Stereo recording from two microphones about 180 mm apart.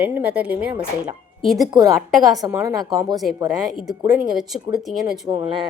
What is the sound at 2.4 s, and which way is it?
Speech, 15° right (ahead or behind).